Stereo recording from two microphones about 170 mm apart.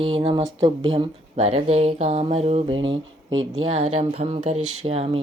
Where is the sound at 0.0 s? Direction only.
30° right (ahead or behind).